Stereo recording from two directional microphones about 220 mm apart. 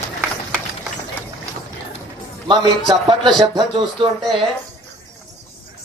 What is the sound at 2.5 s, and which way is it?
Speech, 20° right (ahead or behind).